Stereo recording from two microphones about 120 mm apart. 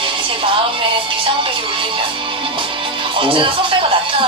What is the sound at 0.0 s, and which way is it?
Speech, 45° right (ahead or behind).